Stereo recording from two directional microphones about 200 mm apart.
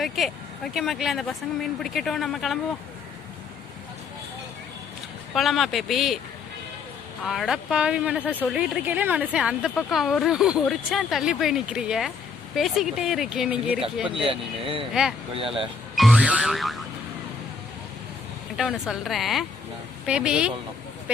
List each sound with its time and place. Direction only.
0.0 s speech: centre (ahead or behind)
5.3 s speech: centre (ahead or behind)
7.3 s speech: centre (ahead or behind)
14.3 s speech: 25° right (ahead or behind)
16.0 s music: 5° right (ahead or behind)
18.5 s speech: centre (ahead or behind)